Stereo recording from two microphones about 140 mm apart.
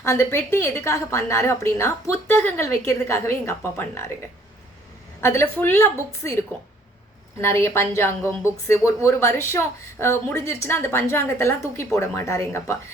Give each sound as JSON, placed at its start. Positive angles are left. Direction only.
{"t": 0.0, "sound": "a woman's voice", "side_deg": 20}
{"t": 5.2, "sound": "a woman's voice", "side_deg": 20}
{"t": 7.3, "sound": "a woman's voice", "side_deg": 20}